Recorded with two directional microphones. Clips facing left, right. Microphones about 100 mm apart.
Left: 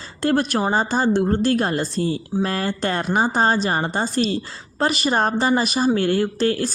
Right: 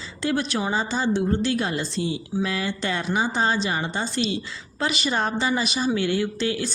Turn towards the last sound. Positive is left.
turn(degrees=45)  # may be behind; listen again after turning